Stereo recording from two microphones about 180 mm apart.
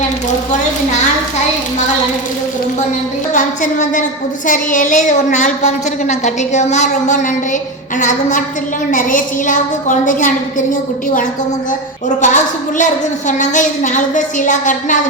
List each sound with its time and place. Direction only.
3.3 s a woman's voice: 45° left (ahead or behind)
8.9 s a woman's voice: 45° left (ahead or behind)